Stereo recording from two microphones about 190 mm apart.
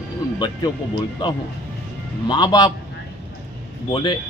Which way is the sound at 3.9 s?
25° left (ahead or behind).